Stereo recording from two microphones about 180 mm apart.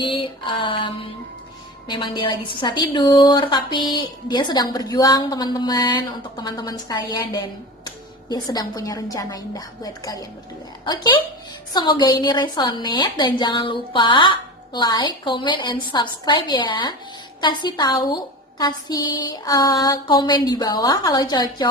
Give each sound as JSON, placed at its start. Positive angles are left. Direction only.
{"t": 0.0, "sound": "a woman's voice", "side_deg": 25}